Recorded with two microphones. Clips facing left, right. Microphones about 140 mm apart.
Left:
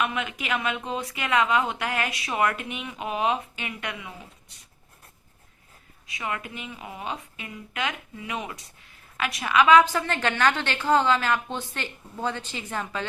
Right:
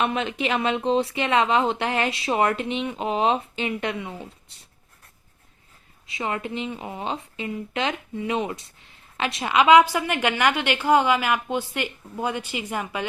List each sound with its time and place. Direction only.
0.0 s speech: 30° right (ahead or behind)
6.1 s a woman's voice: 30° right (ahead or behind); by 13.1 s 10° right (ahead or behind)